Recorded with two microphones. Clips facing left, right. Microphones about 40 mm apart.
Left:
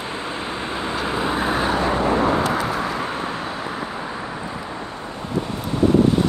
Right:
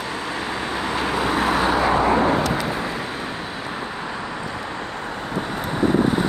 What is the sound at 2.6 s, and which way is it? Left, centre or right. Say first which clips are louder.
Vehicle: left 2 dB; left.